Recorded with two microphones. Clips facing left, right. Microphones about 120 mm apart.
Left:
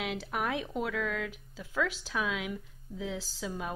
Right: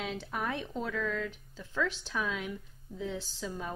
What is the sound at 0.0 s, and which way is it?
Speech, 5° left (ahead or behind).